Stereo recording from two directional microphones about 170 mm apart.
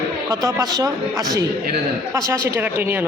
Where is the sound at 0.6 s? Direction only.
20° right (ahead or behind).